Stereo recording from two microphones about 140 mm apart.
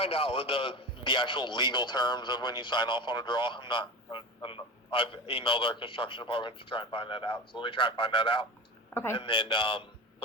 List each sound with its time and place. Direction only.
0.0 s a man's voice: 45° left (ahead or behind)